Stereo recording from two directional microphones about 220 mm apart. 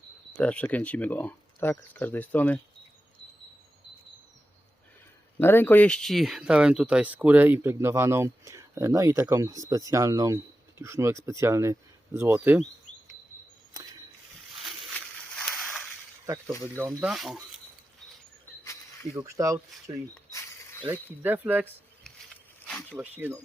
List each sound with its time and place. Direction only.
0.3 s speech: 5° left (ahead or behind)
5.4 s speech: 10° left (ahead or behind); by 12.6 s 10° right (ahead or behind)
13.7 s a sound: 15° right (ahead or behind)
14.6 s a sound: 5° left (ahead or behind)
16.7 s speech: 10° right (ahead or behind)
19.1 s speech: 15° right (ahead or behind)
20.8 s speech: 10° right (ahead or behind)
22.6 s a sound: 5° left (ahead or behind)
23.0 s speech: 10° right (ahead or behind)